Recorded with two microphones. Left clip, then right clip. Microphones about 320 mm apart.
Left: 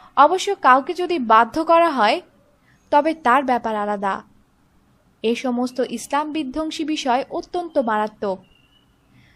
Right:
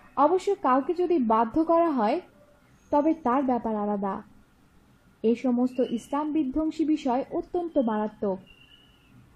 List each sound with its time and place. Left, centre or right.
0.1 s a woman's voice: left
5.4 s a woman's voice: left
7.2 s a woman's voice: left